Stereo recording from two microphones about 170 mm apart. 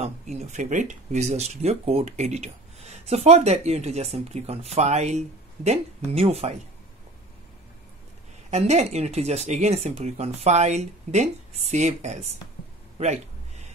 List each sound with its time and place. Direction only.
0.0 s speech: 40° right (ahead or behind)
8.5 s a man's voice: 40° right (ahead or behind)